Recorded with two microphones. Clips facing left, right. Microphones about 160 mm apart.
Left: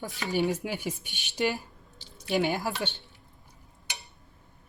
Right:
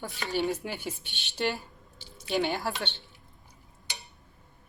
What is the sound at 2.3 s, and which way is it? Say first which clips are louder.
Speech: left 2 dB; centre (ahead or behind).